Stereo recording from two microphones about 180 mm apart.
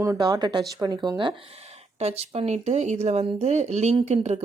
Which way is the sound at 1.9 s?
35° right (ahead or behind).